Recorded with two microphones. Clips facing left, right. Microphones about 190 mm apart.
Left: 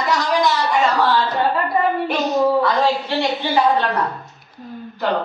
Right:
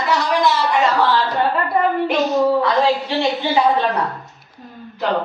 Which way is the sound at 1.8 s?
20° right (ahead or behind).